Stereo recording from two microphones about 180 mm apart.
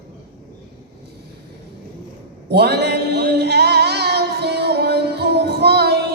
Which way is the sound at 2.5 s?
65° right (ahead or behind).